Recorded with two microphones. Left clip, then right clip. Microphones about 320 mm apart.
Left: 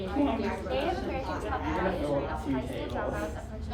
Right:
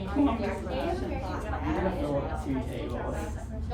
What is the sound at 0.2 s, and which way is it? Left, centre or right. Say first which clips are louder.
Speech: right 2 dB; centre.